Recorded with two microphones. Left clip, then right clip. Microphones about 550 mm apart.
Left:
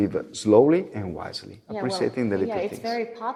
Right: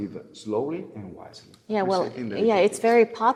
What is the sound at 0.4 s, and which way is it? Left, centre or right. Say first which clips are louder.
Speech: left 11 dB; left.